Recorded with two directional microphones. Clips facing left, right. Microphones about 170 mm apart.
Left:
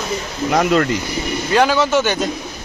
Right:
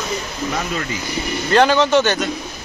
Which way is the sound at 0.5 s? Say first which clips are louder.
Left 12 dB; 70° left (ahead or behind).